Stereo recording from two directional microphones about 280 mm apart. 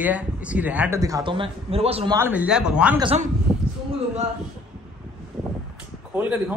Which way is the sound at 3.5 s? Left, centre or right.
Centre.